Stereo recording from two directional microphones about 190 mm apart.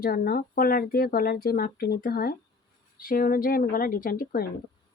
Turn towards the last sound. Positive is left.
turn(degrees=50)  # may be behind; listen again after turning